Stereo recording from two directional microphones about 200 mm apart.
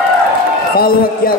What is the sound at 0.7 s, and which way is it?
Speech, 45° left (ahead or behind).